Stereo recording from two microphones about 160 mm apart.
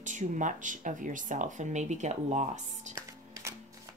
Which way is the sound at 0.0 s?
50° right (ahead or behind).